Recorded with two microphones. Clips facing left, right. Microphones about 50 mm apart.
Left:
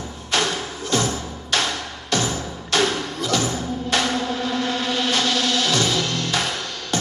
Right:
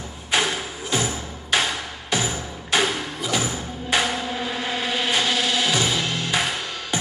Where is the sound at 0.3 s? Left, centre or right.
Centre.